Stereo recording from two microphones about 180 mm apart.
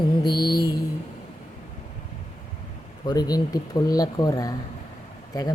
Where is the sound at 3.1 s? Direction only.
20° left (ahead or behind).